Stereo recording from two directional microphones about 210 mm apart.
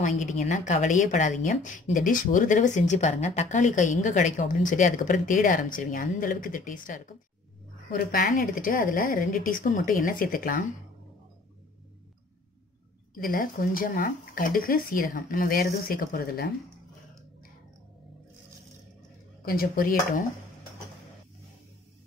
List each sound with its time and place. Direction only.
0.0 s a woman's voice: 35° left (ahead or behind)
13.1 s speech: 40° left (ahead or behind)
19.4 s speech: 45° left (ahead or behind)